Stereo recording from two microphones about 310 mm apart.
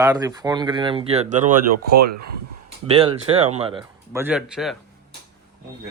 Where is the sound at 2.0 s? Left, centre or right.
Right.